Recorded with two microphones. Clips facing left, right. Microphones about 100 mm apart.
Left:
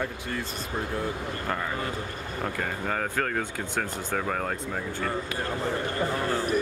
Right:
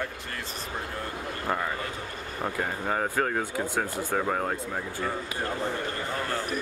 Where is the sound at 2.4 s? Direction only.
15° right (ahead or behind).